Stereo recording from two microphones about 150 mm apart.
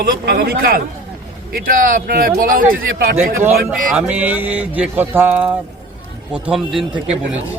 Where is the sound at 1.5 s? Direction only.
70° right (ahead or behind).